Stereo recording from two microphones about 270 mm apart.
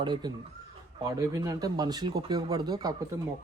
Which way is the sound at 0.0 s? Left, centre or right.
Centre.